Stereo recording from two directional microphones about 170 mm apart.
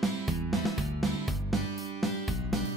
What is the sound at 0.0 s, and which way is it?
Music, centre (ahead or behind).